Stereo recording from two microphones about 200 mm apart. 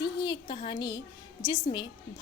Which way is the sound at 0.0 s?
20° left (ahead or behind).